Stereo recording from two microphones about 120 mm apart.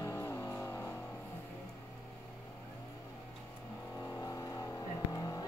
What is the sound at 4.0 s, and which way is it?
Vehicle, 25° left (ahead or behind).